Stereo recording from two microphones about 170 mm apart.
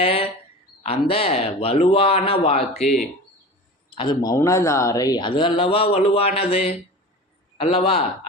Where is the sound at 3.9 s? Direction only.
30° left (ahead or behind).